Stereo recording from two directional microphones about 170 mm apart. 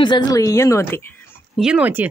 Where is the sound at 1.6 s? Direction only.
5° right (ahead or behind).